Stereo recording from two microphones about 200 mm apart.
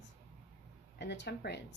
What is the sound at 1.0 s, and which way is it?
Speech, 60° left (ahead or behind).